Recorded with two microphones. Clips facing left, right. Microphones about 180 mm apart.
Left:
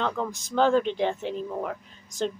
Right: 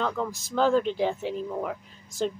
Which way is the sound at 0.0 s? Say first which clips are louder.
Even; centre (ahead or behind).